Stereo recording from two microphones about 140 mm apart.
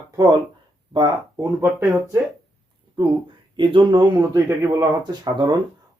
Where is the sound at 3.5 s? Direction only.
35° right (ahead or behind).